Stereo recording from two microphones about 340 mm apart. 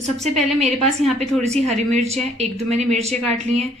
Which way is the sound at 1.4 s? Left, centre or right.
Centre.